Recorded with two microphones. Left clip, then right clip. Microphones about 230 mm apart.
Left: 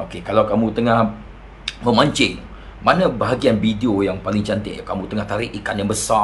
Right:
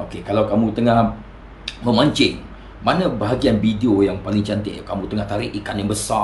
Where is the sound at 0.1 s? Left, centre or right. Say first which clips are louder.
Left 2 dB; centre.